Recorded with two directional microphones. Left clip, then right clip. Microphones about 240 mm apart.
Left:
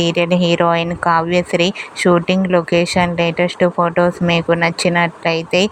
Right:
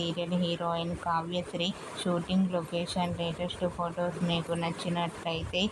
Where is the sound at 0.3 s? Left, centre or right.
Left.